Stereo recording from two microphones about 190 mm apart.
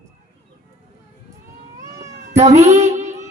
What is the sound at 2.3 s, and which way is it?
Music, 35° right (ahead or behind).